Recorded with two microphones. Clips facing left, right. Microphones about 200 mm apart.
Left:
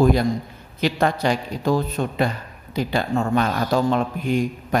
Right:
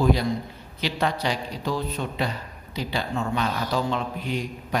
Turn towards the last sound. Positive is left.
turn(degrees=50)  # may be behind; listen again after turning